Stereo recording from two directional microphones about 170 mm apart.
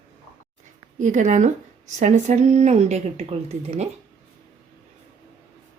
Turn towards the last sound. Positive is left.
turn(degrees=-40)  # may be behind; listen again after turning